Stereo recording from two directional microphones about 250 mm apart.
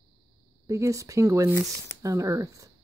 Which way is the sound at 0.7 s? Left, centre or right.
Centre.